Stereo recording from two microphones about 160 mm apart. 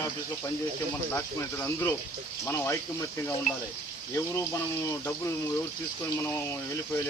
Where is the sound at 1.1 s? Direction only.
15° left (ahead or behind).